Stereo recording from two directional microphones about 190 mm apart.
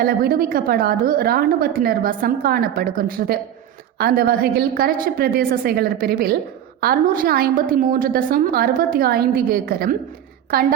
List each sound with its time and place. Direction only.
0.0 s a woman's voice: 50° right (ahead or behind)